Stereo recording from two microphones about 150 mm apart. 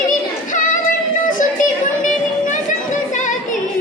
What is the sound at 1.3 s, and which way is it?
Music, 60° left (ahead or behind).